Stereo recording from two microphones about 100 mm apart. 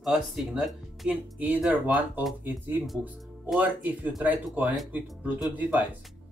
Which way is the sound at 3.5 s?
15° right (ahead or behind).